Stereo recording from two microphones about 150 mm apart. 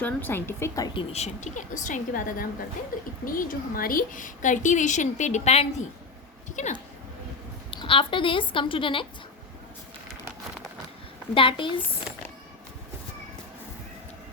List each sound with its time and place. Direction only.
0.0 s speech: 15° left (ahead or behind)
0.9 s a woman's voice: 45° left (ahead or behind)
7.7 s speech: 35° left (ahead or behind)
11.3 s speech: 35° left (ahead or behind)